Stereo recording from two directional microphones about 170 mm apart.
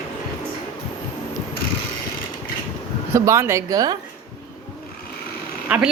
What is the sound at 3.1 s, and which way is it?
Speech, 15° right (ahead or behind).